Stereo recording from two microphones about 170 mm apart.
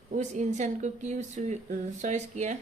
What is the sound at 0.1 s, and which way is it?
A woman's voice, 45° right (ahead or behind).